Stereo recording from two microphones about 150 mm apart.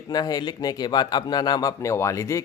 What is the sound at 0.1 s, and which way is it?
Speech, 25° left (ahead or behind).